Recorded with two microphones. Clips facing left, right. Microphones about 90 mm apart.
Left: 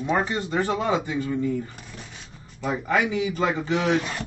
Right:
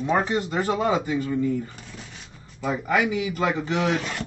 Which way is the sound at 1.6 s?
5° left (ahead or behind).